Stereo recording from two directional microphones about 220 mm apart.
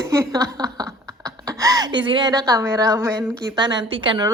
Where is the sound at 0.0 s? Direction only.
15° right (ahead or behind).